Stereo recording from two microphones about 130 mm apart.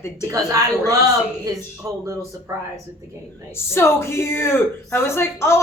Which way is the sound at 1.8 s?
25° right (ahead or behind).